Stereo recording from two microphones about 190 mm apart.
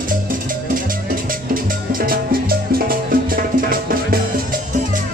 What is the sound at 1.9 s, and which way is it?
Music, 50° right (ahead or behind).